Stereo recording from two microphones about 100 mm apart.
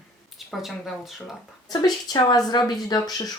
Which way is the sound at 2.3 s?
45° left (ahead or behind).